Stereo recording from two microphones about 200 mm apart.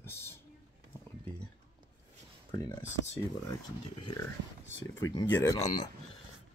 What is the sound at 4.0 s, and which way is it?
Speech, 25° left (ahead or behind).